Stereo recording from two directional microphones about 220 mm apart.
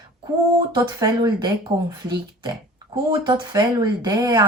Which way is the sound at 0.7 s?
20° right (ahead or behind).